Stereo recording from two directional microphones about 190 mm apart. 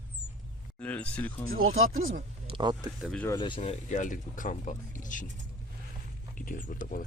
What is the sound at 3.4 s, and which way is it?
Speech, 25° left (ahead or behind).